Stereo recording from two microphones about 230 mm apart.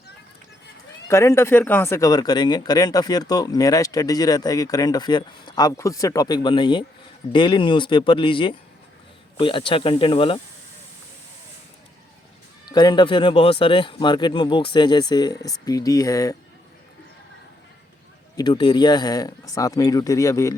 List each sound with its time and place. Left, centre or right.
1.0 s speech: centre
12.6 s speech: centre
18.3 s speech: left